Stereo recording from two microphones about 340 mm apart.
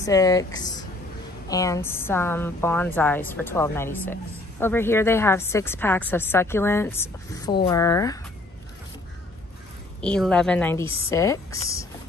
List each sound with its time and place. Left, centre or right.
0.0 s a woman's voice: centre
10.0 s a woman's voice: centre